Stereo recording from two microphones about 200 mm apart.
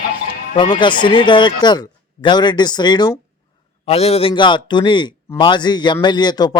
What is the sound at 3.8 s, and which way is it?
Speech, 30° left (ahead or behind).